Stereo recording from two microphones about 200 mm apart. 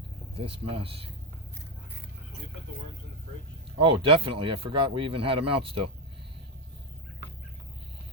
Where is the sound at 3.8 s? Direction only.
25° right (ahead or behind).